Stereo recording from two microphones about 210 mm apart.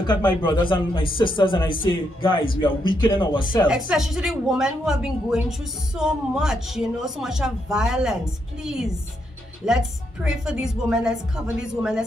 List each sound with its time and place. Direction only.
0.0 s speech: 20° left (ahead or behind)
3.9 s a woman's voice: centre (ahead or behind)